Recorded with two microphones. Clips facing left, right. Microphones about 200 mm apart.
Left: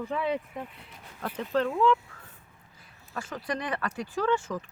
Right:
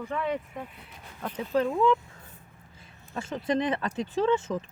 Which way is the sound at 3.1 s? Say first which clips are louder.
Right 5 dB; 25° right (ahead or behind).